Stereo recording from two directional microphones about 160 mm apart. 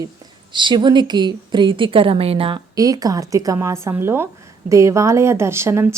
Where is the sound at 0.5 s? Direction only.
30° right (ahead or behind).